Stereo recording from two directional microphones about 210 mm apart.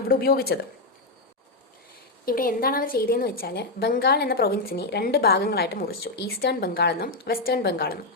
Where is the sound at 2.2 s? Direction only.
45° left (ahead or behind).